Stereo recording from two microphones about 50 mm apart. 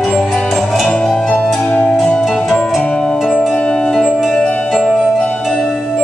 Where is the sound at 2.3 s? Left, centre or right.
Centre.